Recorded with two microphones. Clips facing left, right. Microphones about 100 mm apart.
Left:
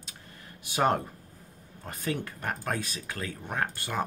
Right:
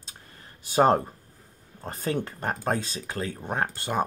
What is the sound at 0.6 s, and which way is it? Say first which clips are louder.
Speech: right 6 dB; 35° right (ahead or behind).